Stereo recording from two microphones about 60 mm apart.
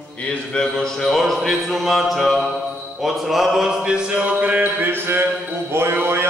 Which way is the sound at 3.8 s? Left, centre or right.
Centre.